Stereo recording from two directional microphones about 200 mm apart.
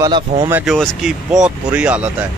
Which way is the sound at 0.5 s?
10° right (ahead or behind).